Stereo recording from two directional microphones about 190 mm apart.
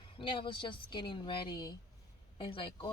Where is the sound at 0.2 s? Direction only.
25° left (ahead or behind).